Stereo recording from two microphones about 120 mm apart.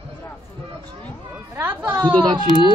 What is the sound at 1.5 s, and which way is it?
Chatter, 15° right (ahead or behind).